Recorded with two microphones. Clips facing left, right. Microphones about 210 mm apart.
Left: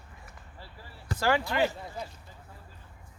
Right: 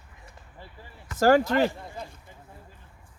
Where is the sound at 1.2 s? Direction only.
45° right (ahead or behind).